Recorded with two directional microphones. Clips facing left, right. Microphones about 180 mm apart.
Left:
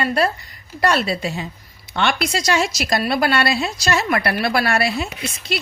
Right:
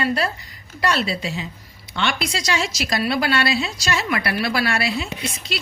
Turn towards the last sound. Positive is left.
turn(degrees=50)  # may be behind; listen again after turning